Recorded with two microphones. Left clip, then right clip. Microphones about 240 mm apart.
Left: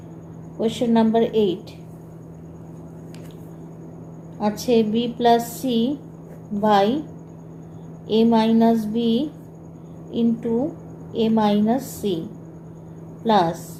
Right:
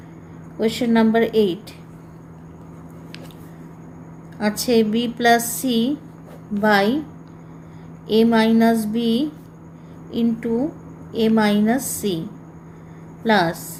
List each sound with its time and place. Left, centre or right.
0.6 s a woman's voice: right
4.6 s a woman's voice: right
8.1 s a woman's voice: right
13.2 s a woman's voice: right